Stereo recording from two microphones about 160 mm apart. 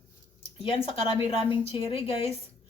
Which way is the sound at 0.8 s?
35° left (ahead or behind).